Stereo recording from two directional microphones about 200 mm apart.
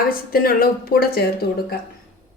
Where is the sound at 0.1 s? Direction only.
45° left (ahead or behind).